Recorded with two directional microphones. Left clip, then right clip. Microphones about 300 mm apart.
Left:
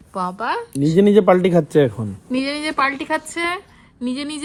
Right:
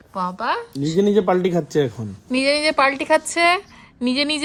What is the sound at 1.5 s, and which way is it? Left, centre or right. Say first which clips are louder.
Speech: left 5 dB; centre.